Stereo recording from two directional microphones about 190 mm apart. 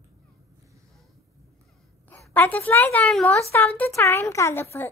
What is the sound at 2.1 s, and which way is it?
A woman's voice, 10° left (ahead or behind).